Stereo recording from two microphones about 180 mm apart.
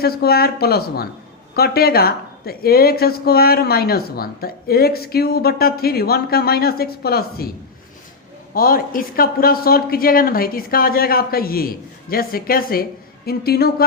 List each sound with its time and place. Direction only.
0.0 s speech: 60° left (ahead or behind)
8.5 s speech: 55° left (ahead or behind)